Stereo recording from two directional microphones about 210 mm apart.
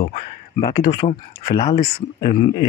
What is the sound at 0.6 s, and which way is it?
Speech, 25° left (ahead or behind).